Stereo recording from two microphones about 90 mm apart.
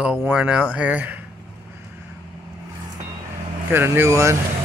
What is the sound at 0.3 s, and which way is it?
Speech, 10° right (ahead or behind).